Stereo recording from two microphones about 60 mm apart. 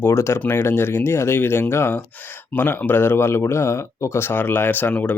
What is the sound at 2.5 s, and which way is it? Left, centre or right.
Speech, left.